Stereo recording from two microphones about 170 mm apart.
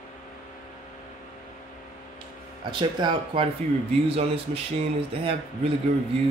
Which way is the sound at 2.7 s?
30° right (ahead or behind).